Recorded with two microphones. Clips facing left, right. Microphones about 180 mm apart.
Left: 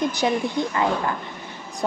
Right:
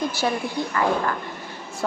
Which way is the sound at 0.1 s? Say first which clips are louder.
Left 2 dB; 20° left (ahead or behind).